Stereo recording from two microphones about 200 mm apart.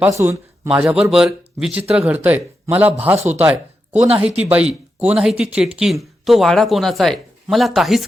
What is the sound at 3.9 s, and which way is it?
Speech, 30° right (ahead or behind).